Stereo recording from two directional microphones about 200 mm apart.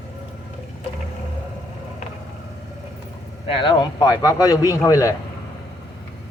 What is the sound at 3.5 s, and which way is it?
A man's voice, 25° left (ahead or behind).